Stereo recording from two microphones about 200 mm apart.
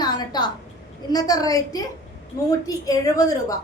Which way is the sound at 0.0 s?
20° left (ahead or behind).